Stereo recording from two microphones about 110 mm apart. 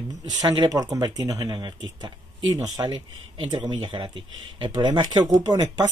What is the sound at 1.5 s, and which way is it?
Speech, 45° right (ahead or behind).